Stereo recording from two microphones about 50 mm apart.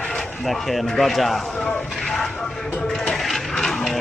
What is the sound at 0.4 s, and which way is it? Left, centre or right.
Speech, centre.